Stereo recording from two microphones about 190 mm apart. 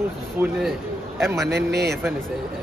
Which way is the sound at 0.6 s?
Centre (ahead or behind).